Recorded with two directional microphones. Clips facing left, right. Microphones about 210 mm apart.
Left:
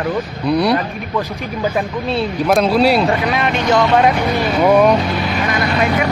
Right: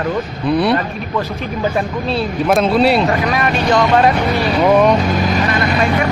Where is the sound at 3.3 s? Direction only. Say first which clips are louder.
Even; 20° left (ahead or behind).